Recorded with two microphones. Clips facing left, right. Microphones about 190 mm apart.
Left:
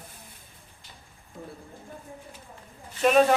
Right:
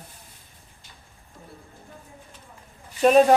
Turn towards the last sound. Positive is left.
turn(degrees=-35)  # may be behind; listen again after turning